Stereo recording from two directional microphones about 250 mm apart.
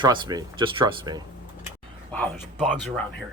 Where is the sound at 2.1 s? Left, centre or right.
Centre.